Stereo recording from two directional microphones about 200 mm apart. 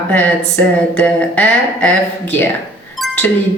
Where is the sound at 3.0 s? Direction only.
Centre (ahead or behind).